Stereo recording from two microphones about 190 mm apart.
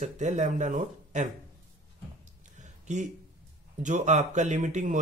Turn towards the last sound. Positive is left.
turn(degrees=-40)  # may be behind; listen again after turning